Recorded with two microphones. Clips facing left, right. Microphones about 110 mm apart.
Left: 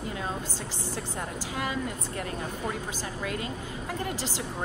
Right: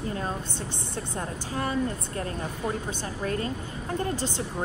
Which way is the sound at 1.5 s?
35° right (ahead or behind).